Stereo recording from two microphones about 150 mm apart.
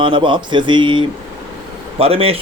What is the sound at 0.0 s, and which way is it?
A man's voice, 35° right (ahead or behind).